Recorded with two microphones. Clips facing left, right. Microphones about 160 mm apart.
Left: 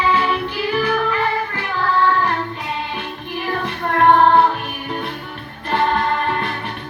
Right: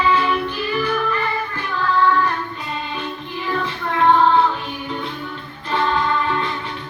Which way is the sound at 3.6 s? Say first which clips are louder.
Left 3 dB; 60° left (ahead or behind).